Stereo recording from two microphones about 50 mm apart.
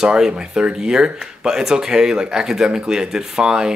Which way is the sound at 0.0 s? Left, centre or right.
Centre.